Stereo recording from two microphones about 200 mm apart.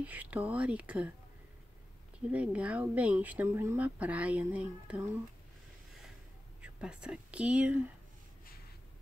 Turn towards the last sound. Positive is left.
turn(degrees=-5)  # may be behind; listen again after turning